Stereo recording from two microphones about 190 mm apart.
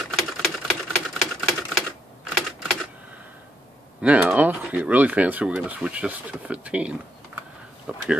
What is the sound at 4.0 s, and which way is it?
Speech, 5° right (ahead or behind).